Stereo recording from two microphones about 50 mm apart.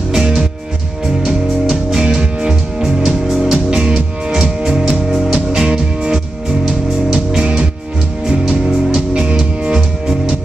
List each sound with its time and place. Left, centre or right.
0.1 s music: centre